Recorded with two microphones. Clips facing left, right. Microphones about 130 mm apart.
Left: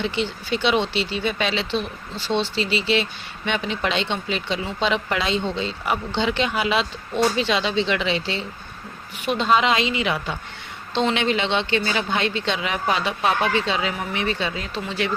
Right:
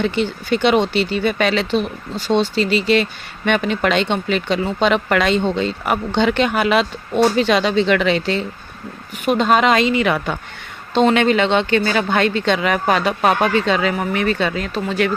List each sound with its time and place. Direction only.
0.0 s speech: 55° right (ahead or behind)